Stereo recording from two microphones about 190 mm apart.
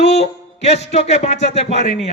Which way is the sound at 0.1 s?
35° left (ahead or behind).